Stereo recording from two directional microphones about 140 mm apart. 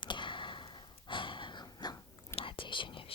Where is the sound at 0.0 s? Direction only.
35° left (ahead or behind).